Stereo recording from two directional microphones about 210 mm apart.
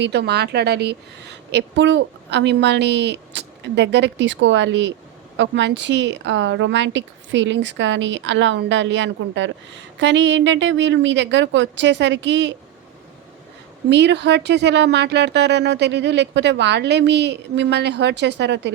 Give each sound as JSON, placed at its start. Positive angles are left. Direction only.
{"t": 0.0, "sound": "a woman's voice", "side_deg": -50}
{"t": 13.9, "sound": "a woman's voice", "side_deg": -55}